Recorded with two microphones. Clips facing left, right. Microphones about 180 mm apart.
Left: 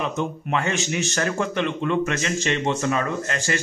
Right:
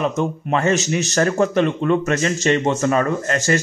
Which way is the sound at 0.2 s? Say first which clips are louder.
Right 5 dB; 40° right (ahead or behind).